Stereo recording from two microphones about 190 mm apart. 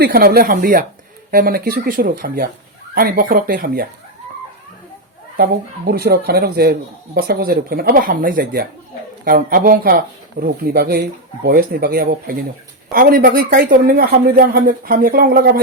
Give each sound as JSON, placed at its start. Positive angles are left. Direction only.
{"t": 0.0, "sound": "speech", "side_deg": -50}
{"t": 5.4, "sound": "speech", "side_deg": -55}